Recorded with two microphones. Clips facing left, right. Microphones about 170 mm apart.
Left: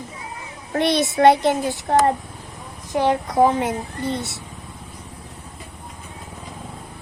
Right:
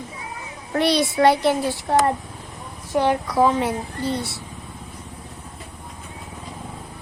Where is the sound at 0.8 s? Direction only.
20° left (ahead or behind).